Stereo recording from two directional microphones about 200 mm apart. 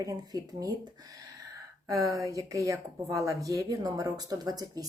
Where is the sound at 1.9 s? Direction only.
15° right (ahead or behind).